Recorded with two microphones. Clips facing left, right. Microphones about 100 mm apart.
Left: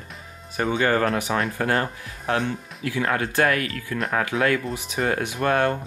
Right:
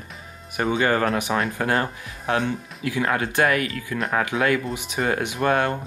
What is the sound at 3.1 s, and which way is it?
Speech, 20° right (ahead or behind).